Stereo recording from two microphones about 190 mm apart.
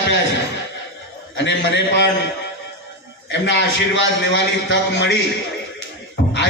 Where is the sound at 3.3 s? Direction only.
70° left (ahead or behind).